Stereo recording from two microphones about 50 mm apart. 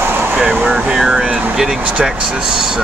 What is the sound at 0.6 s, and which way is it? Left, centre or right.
Speech, centre.